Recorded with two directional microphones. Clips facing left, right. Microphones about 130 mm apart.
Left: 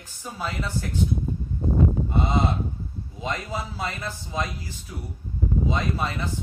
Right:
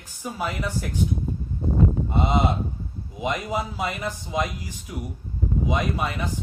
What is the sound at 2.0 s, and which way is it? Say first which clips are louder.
A man's voice: right 2 dB; 20° right (ahead or behind).